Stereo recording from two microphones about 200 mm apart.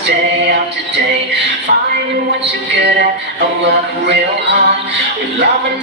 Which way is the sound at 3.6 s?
60° right (ahead or behind).